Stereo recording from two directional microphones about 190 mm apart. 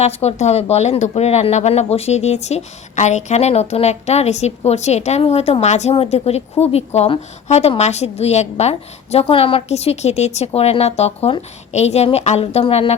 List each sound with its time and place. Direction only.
0.0 s speech: 35° left (ahead or behind)